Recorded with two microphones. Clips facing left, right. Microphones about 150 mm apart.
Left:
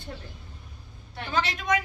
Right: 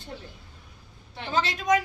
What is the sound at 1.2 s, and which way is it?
Speech, 25° right (ahead or behind).